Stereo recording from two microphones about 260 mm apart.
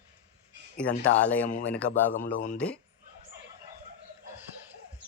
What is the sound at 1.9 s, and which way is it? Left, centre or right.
Speech, left.